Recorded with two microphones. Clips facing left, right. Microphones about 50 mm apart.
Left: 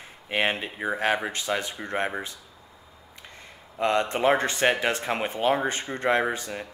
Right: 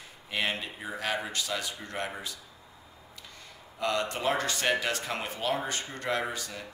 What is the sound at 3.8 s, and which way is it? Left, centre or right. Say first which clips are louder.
Speech: left 6 dB; left.